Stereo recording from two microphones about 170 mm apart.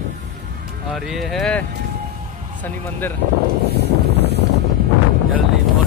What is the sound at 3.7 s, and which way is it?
Wind noise, 80° right.